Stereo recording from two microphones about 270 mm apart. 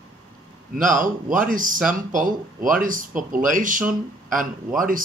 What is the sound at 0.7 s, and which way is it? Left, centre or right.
Speech, right.